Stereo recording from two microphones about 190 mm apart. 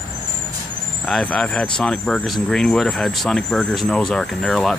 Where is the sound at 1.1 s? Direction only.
5° left (ahead or behind).